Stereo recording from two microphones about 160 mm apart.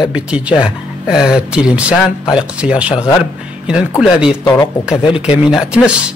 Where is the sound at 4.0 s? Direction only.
5° right (ahead or behind).